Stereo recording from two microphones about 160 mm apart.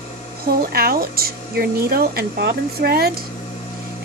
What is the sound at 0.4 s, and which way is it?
Speech, 70° right (ahead or behind).